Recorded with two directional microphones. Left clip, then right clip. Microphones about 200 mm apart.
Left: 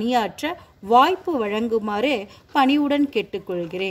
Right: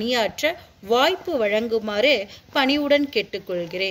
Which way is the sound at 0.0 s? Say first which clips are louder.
Right 1 dB; 40° left (ahead or behind).